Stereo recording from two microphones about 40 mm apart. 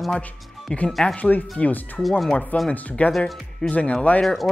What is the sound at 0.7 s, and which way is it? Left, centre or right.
Speech, left.